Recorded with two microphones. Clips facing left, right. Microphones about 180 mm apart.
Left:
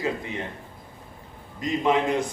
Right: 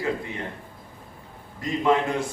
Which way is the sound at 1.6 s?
20° left (ahead or behind).